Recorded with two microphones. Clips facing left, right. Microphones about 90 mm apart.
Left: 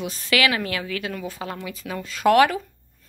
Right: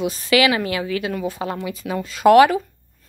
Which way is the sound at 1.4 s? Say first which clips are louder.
Right 6 dB; 25° right (ahead or behind).